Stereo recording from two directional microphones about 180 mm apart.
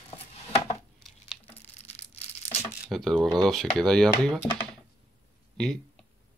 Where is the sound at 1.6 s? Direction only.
35° left (ahead or behind).